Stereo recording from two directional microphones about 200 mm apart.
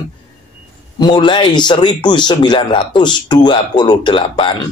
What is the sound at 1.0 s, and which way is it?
Speech, 25° left (ahead or behind).